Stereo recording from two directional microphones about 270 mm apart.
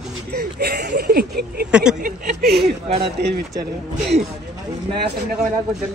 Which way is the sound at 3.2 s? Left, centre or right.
Right.